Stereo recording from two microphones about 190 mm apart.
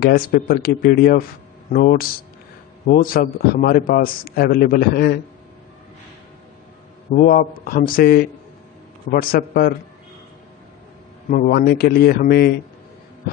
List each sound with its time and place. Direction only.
0.0 s a man's voice: 50° left (ahead or behind)
7.1 s a man's voice: 45° left (ahead or behind)
11.2 s a man's voice: 45° left (ahead or behind)